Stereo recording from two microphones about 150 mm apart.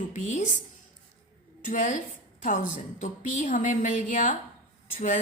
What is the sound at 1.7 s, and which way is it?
A woman's voice, 60° left (ahead or behind).